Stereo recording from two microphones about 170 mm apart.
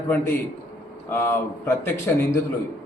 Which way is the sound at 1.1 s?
15° left (ahead or behind).